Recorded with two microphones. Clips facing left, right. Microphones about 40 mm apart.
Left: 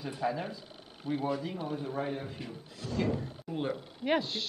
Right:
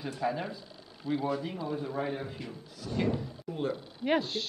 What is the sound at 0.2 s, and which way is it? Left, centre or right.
Speech, centre.